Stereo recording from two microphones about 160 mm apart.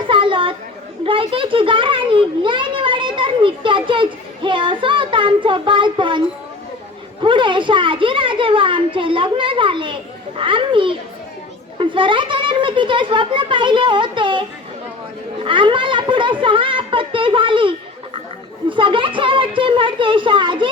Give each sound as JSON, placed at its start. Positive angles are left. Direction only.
{"t": 0.1, "sound": "chatter", "side_deg": -30}
{"t": 1.0, "sound": "a sound", "side_deg": -35}
{"t": 7.2, "sound": "a woman's voice", "side_deg": -30}
{"t": 15.4, "sound": "a woman's voice", "side_deg": -30}
{"t": 18.8, "sound": "a woman's voice", "side_deg": -30}